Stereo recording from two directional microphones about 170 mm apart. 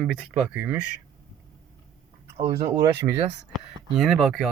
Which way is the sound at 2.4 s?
30° right (ahead or behind).